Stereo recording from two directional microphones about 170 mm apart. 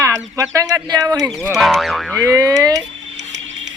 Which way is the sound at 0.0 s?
20° right (ahead or behind).